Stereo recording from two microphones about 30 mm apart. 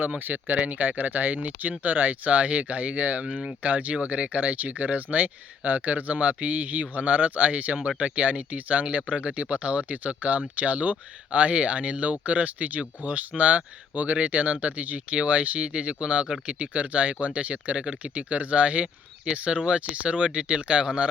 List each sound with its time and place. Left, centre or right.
0.5 s speech: right
3.6 s speech: right
15.2 s speech: right